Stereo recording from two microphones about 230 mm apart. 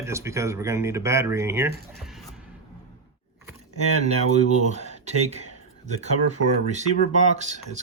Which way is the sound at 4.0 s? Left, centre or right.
Right.